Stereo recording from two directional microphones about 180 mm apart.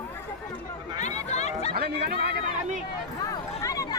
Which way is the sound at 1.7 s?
60° right (ahead or behind).